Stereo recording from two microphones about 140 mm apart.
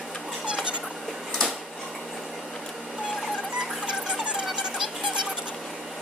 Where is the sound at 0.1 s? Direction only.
5° right (ahead or behind).